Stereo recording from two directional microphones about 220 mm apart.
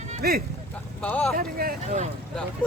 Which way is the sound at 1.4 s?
40° right (ahead or behind).